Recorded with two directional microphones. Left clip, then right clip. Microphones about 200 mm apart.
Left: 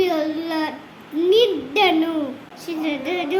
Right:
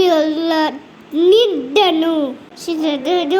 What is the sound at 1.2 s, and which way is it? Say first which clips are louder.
A child's voice: right 5 dB; 30° right (ahead or behind).